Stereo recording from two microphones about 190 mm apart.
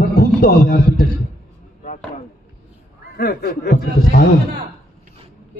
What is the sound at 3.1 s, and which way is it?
A man's voice, 55° left (ahead or behind).